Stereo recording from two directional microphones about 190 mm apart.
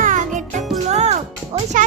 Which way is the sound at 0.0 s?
40° right (ahead or behind).